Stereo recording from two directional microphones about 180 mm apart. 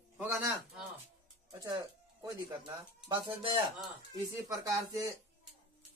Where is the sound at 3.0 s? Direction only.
25° right (ahead or behind).